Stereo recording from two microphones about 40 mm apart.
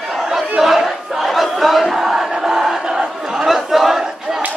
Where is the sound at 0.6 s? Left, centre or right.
Centre.